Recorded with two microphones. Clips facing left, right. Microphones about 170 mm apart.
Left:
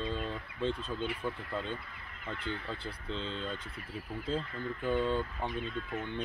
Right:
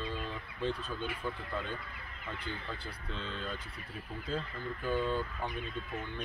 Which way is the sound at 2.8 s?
25° left (ahead or behind).